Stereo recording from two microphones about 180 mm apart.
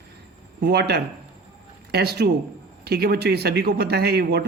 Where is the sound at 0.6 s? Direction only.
65° right (ahead or behind).